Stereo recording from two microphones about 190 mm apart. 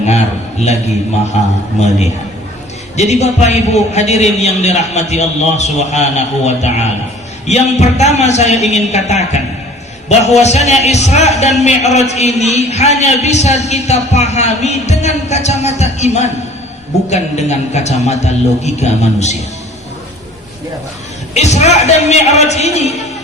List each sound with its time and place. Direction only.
0.6 s a man's voice: 35° left (ahead or behind)
1.8 s a man's voice: 35° left (ahead or behind)
21.3 s a man's voice: 35° left (ahead or behind)